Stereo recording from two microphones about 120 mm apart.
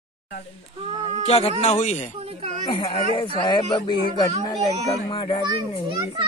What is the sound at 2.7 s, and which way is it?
Speech, 50° left (ahead or behind).